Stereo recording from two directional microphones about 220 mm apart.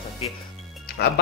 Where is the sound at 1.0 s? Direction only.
45° left (ahead or behind).